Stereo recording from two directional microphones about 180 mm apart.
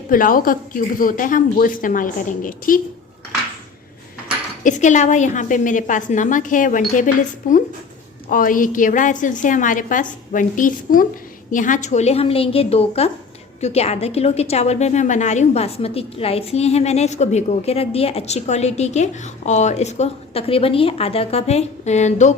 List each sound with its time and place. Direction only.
0.1 s a woman's voice: 50° left (ahead or behind)
4.6 s a woman's voice: 40° left (ahead or behind)